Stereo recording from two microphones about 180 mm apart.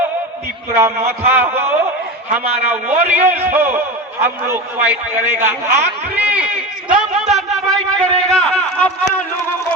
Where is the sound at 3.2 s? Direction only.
10° right (ahead or behind).